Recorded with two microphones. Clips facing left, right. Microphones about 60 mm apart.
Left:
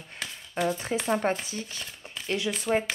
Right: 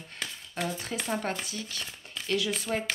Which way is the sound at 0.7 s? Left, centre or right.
Left.